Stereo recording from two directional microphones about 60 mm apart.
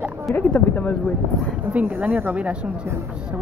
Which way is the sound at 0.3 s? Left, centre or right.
Centre.